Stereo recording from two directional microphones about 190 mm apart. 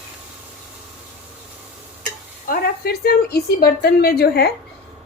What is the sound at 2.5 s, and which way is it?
A woman's voice, 55° left (ahead or behind).